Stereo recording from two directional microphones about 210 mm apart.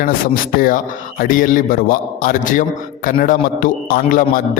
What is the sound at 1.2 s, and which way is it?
A man's voice, 40° left (ahead or behind).